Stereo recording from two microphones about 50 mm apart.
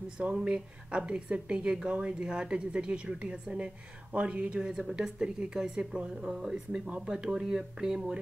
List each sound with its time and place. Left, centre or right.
0.2 s a woman's voice: centre
4.7 s speech: centre